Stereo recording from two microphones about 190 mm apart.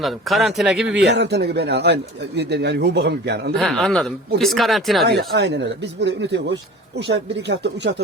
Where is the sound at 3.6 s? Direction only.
Centre (ahead or behind).